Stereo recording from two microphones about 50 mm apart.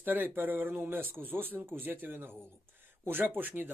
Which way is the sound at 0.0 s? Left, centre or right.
Right.